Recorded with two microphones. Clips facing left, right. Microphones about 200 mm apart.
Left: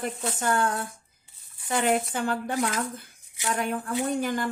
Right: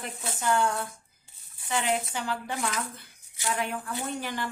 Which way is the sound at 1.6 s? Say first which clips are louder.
Left 4 dB; 50° left (ahead or behind).